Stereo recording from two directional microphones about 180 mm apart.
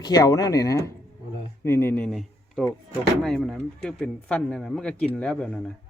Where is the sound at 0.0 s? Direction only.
20° left (ahead or behind).